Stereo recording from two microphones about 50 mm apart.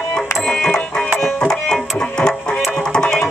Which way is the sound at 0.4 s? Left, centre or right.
Centre.